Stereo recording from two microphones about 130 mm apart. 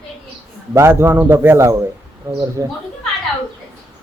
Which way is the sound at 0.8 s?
20° right (ahead or behind).